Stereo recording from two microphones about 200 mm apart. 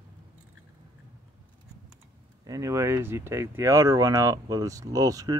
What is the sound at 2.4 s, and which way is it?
Speech, 15° right (ahead or behind).